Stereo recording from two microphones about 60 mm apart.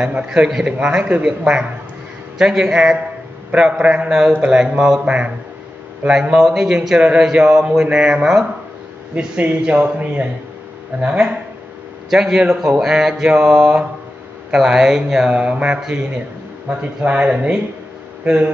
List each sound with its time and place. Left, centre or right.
0.0 s speech: centre
5.0 s speech: right
6.0 s speech: centre
7.0 s speech: centre
9.4 s speech: right
15.3 s speech: right